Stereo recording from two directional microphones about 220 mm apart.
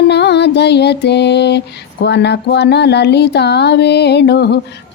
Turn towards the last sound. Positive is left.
turn(degrees=50)  # may be behind; listen again after turning